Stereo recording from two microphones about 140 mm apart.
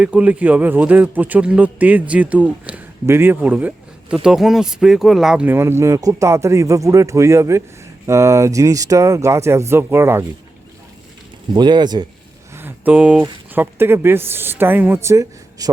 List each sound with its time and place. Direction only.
0.0 s a man's voice: 10° right (ahead or behind)
5.5 s speech: 20° right (ahead or behind)
11.5 s speech: 30° right (ahead or behind)
12.5 s a man's voice: 15° right (ahead or behind)